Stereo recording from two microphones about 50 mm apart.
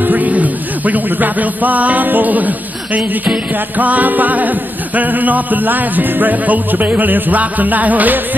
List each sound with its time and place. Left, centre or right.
0.0 s music: right